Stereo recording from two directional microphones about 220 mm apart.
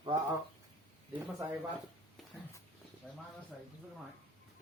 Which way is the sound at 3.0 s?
5° right (ahead or behind).